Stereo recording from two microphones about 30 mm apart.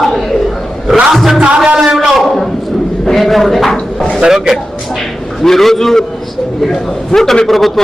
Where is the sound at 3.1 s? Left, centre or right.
Centre.